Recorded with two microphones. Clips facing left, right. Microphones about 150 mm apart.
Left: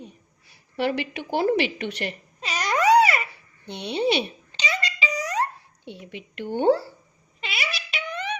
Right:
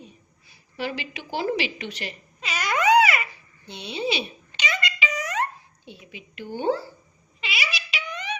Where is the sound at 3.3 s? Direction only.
65° left (ahead or behind).